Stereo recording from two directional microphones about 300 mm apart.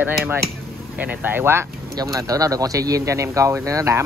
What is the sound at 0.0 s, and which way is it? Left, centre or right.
Speech, centre.